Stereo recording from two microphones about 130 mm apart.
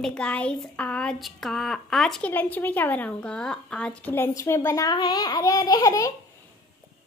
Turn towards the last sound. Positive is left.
turn(degrees=25)  # may be behind; listen again after turning